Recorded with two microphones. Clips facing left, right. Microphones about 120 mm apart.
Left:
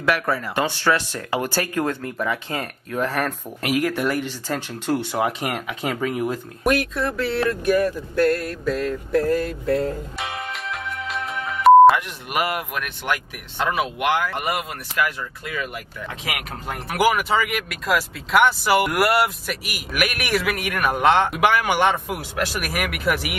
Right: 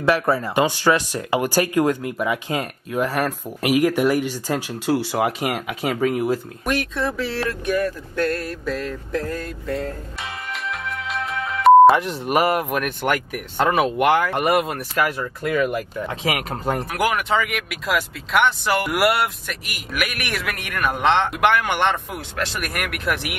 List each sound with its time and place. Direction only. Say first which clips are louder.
0.0 s speech: right 3 dB; 25° right (ahead or behind); by 9.8 s 5° left (ahead or behind)
10.5 s music: right 1 dB; centre (ahead or behind)
11.9 s speech: right 4 dB; 35° right (ahead or behind)
16.1 s speech: right 4 dB; 35° right (ahead or behind)
16.9 s speech: left 4 dB; 5° left (ahead or behind)